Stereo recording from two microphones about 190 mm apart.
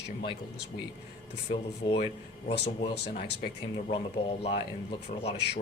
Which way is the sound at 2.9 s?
60° left (ahead or behind).